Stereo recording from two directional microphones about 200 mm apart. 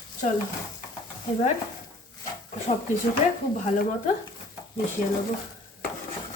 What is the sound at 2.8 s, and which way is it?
Speech, 40° left (ahead or behind).